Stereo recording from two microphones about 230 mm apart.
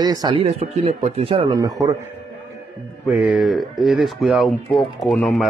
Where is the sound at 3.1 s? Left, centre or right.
Centre.